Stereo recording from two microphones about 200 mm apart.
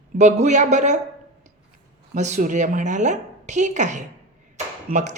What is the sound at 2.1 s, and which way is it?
A woman's voice, 35° right (ahead or behind).